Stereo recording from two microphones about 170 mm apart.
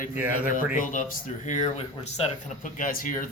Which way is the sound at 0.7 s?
50° left (ahead or behind).